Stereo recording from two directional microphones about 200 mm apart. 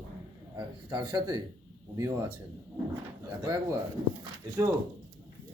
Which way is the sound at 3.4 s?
20° right (ahead or behind).